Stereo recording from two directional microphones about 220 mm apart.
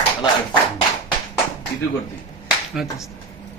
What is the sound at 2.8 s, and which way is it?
Speech, centre (ahead or behind).